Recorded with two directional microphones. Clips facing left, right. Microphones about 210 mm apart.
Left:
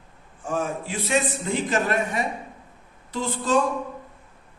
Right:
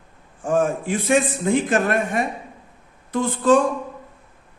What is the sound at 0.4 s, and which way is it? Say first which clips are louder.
A man's voice: right 7 dB; 50° right (ahead or behind).